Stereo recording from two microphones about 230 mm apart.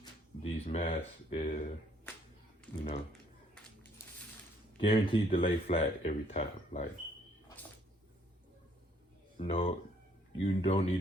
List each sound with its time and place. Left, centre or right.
0.0 s speech: left
2.7 s speech: centre
4.8 s speech: left
9.4 s speech: left